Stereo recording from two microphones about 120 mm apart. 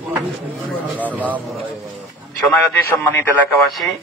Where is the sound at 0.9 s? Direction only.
15° right (ahead or behind).